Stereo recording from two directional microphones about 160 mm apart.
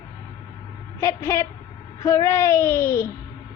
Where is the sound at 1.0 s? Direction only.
20° left (ahead or behind).